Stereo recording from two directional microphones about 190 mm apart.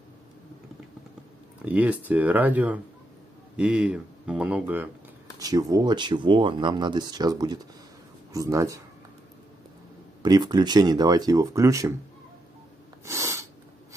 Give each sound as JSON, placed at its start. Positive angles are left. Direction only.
{"t": 1.6, "sound": "speech", "side_deg": -5}
{"t": 5.4, "sound": "speech", "side_deg": -20}
{"t": 10.2, "sound": "speech", "side_deg": -20}
{"t": 13.0, "sound": "snort", "side_deg": -15}